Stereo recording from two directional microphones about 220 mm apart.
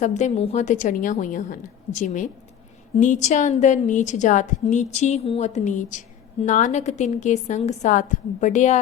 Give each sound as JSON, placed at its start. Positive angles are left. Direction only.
{"t": 0.0, "sound": "a woman's voice", "side_deg": 30}